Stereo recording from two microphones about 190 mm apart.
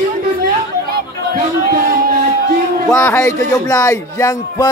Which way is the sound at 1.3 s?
50° right (ahead or behind).